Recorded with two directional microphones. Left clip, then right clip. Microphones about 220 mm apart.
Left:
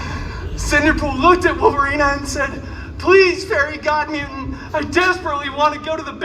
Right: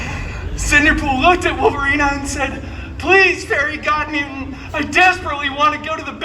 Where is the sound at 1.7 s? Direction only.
10° left (ahead or behind).